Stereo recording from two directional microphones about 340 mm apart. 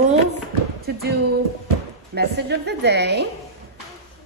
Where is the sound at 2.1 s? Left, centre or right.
Right.